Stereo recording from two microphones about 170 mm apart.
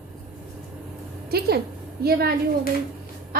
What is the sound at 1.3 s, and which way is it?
A woman's voice, 65° right (ahead or behind).